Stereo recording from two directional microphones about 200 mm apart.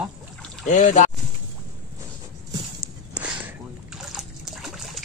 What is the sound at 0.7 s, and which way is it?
Speech, 40° left (ahead or behind).